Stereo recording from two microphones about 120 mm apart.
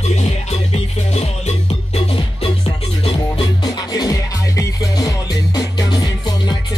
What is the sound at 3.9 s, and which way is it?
Music, 30° left (ahead or behind).